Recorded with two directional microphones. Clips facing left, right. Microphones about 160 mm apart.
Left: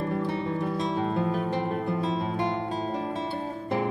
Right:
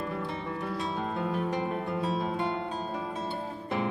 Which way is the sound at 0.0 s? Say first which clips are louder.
Left 5 dB; 45° left (ahead or behind).